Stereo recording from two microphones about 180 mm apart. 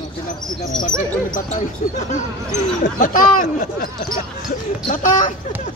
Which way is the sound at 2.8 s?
50° left (ahead or behind).